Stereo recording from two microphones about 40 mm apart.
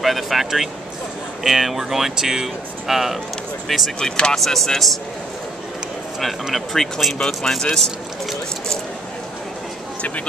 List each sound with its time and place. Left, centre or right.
0.0 s speech: centre
4.0 s speech: centre
6.1 s speech: centre
6.5 s speech: centre